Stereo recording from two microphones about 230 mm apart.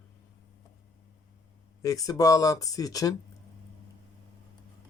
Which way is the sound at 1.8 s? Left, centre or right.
Centre.